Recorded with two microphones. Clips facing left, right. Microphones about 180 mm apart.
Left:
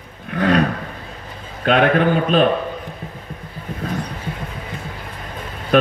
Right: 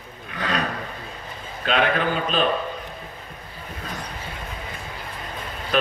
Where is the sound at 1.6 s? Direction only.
55° left (ahead or behind).